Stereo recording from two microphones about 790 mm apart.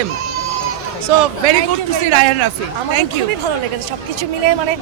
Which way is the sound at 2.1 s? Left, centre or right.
Right.